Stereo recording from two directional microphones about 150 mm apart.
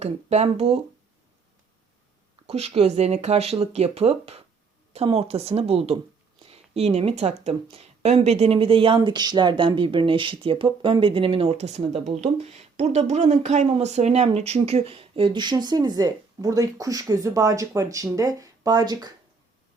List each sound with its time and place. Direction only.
0.0 s speech: 45° right (ahead or behind)
2.5 s speech: 45° right (ahead or behind); by 19.1 s 25° right (ahead or behind)